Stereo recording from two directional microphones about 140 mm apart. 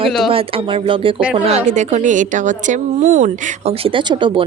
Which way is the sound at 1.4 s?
55° right (ahead or behind).